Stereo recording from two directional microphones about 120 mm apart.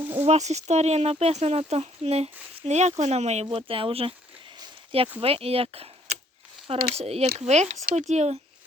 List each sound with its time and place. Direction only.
0.0 s a sound: 15° right (ahead or behind)
0.3 s speech: 70° right (ahead or behind)
2.6 s speech: 70° right (ahead or behind)
3.4 s speech: 50° right (ahead or behind)
5.2 s speech: 55° right (ahead or behind)